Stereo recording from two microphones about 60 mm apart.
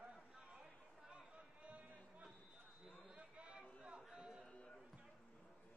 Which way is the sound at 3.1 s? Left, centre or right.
Centre.